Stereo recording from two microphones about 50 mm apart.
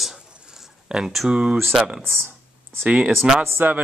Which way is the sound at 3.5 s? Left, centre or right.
Right.